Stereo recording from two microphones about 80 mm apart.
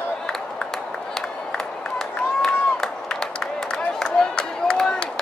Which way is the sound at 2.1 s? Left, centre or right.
Centre.